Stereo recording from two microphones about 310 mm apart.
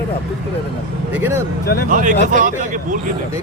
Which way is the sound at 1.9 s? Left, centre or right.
Right.